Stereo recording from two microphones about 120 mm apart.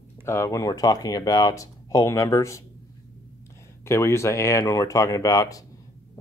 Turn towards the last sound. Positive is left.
turn(degrees=30)  # may be behind; listen again after turning